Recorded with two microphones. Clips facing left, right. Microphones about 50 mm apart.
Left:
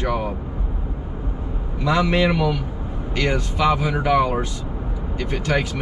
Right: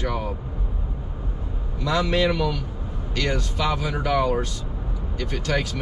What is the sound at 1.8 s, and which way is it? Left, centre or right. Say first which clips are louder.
Speech: left 3 dB; left.